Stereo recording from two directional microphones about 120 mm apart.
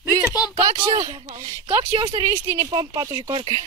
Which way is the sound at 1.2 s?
55° right (ahead or behind).